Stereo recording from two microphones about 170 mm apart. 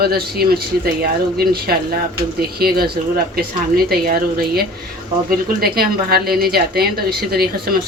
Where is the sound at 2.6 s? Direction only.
65° right (ahead or behind).